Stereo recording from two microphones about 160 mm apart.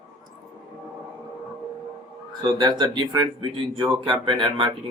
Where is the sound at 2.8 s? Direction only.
25° right (ahead or behind).